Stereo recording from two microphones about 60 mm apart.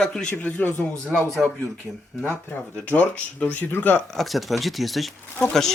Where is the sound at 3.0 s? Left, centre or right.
Left.